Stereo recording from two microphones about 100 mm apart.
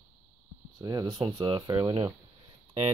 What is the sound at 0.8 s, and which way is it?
Speech, 35° right (ahead or behind).